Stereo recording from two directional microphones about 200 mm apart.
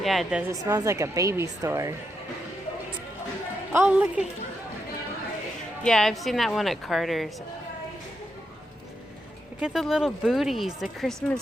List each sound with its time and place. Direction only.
0.0 s speech: centre (ahead or behind)
0.6 s speech: 15° right (ahead or behind)
3.7 s speech: 10° right (ahead or behind)
5.8 s speech: centre (ahead or behind)
9.6 s speech: 5° right (ahead or behind)